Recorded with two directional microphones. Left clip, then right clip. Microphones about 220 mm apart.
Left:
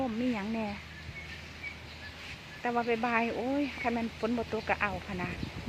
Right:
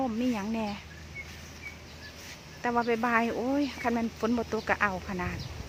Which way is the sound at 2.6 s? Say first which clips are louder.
Right 3 dB; 20° right (ahead or behind).